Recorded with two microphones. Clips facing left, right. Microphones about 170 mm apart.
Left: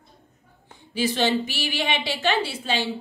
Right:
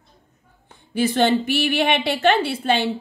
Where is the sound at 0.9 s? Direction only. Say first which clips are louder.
Right 4 dB; 55° right (ahead or behind).